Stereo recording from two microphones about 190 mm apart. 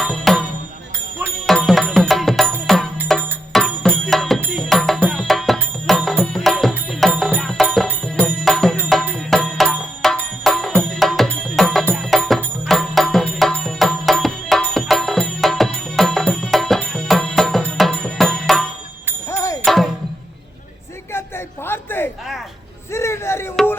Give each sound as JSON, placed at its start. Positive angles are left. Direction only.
{"t": 0.0, "sound": "music", "side_deg": 0}
{"t": 1.5, "sound": "music", "side_deg": 0}
{"t": 19.3, "sound": "music", "side_deg": 15}
{"t": 19.6, "sound": "music", "side_deg": 0}
{"t": 21.1, "sound": "a sound", "side_deg": 10}